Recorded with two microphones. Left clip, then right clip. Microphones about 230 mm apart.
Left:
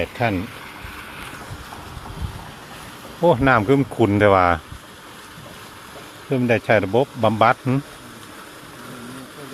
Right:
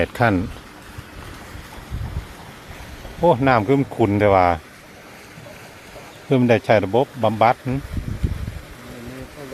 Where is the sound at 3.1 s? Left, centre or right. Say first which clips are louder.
Even; centre.